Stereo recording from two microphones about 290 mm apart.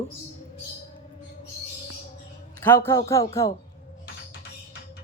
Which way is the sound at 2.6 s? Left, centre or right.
Centre.